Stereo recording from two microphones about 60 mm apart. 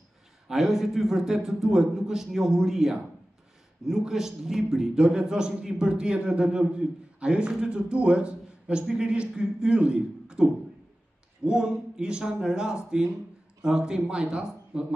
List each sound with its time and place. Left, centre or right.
0.5 s a man's voice: centre
4.0 s a man's voice: centre